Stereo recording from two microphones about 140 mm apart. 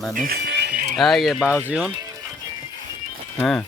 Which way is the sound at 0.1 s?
80° right.